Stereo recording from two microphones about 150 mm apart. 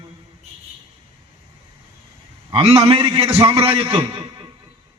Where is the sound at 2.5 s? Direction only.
40° right (ahead or behind).